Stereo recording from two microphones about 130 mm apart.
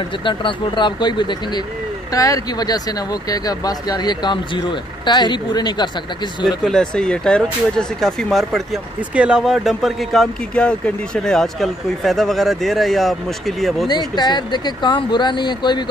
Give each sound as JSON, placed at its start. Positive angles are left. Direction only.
{"t": 0.2, "sound": "speech", "side_deg": 40}
{"t": 6.6, "sound": "speech", "side_deg": 5}
{"t": 13.8, "sound": "speech", "side_deg": 35}